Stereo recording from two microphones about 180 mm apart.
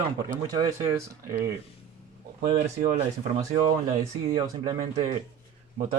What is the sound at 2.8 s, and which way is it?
Speech, 50° right (ahead or behind).